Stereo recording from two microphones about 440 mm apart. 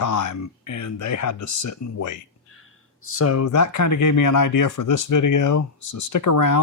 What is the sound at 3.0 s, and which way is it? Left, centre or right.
Speech, left.